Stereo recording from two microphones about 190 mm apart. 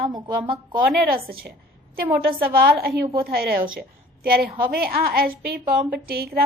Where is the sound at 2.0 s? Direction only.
50° right (ahead or behind).